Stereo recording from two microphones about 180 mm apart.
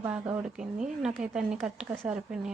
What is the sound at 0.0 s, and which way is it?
Speech, 10° right (ahead or behind).